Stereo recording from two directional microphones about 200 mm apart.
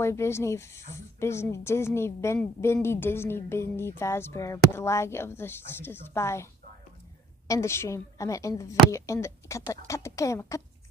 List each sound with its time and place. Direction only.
0.0 s speech: 15° left (ahead or behind)